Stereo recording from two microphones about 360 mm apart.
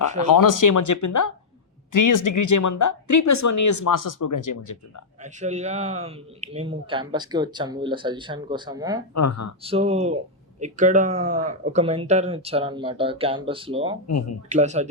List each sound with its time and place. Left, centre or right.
0.2 s speech: left
5.2 s speech: centre
9.1 s speech: left
9.6 s speech: centre